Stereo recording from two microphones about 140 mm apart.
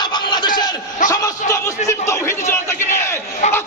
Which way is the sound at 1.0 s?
70° left (ahead or behind).